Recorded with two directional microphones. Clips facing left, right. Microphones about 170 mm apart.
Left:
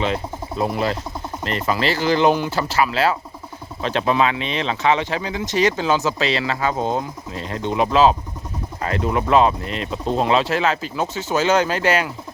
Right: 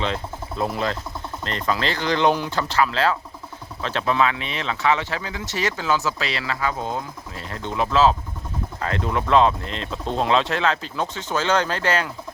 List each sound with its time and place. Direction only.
0.0 s speech: 5° left (ahead or behind)
8.8 s speech: 5° left (ahead or behind)